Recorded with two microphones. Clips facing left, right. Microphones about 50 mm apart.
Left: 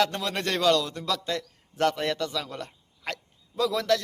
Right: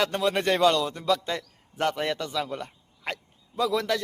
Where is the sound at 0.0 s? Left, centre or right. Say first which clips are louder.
Right 2 dB; centre.